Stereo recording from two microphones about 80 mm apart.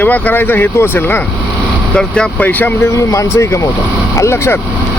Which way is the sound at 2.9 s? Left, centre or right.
Left.